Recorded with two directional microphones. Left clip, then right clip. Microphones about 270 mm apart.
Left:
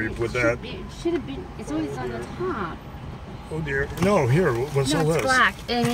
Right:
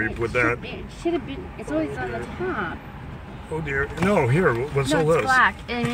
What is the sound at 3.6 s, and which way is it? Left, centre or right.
Speech, centre.